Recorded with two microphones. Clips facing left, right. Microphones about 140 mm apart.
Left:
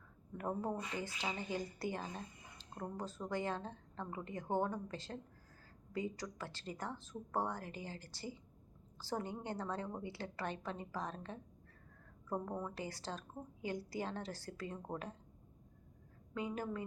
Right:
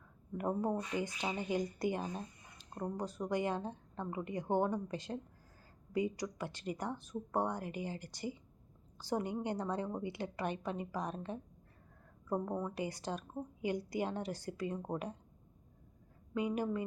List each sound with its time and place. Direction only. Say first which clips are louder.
0.3 s speech: right 5 dB; 15° right (ahead or behind)
16.3 s speech: right 6 dB; 15° right (ahead or behind)